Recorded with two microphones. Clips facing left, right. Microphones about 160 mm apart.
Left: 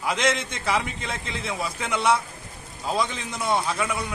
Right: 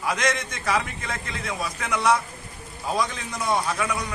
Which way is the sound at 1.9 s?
25° left (ahead or behind).